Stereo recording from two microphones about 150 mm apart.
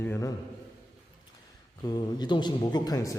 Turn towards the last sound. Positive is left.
turn(degrees=25)  # may be behind; listen again after turning